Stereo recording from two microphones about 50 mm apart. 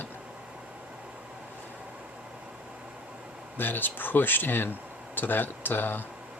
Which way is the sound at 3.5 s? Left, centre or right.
Left.